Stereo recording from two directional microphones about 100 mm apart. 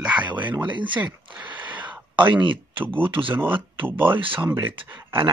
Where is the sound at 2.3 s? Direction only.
55° right (ahead or behind).